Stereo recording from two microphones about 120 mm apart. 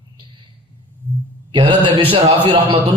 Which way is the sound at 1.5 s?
40° right (ahead or behind).